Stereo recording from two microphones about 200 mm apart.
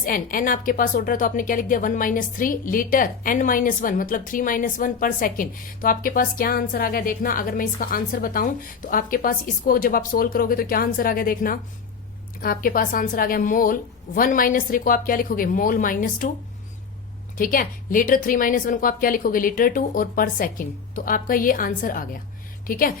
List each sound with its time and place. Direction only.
0.0 s a woman's voice: 45° left (ahead or behind)
17.3 s a woman's voice: 45° left (ahead or behind)